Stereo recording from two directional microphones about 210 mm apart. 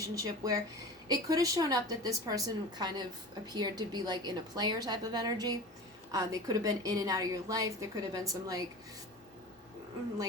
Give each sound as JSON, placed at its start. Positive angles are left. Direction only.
{"t": 0.2, "sound": "a woman's voice", "side_deg": -15}